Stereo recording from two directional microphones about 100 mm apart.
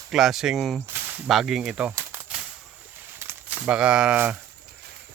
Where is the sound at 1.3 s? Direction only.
5° right (ahead or behind).